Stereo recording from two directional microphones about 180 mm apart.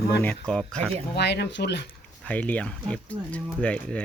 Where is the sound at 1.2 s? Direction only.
70° left (ahead or behind).